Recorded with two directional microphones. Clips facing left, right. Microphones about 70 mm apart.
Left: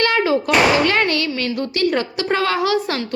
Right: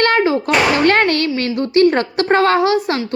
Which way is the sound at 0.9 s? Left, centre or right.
Right.